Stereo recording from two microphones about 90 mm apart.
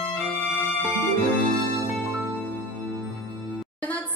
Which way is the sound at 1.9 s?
Centre (ahead or behind).